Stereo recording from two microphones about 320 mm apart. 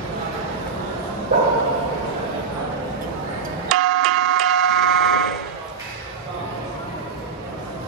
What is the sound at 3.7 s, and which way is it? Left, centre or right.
Doorbell, centre.